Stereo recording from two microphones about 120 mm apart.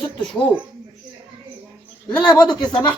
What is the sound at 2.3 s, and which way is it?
Speech, 35° left (ahead or behind).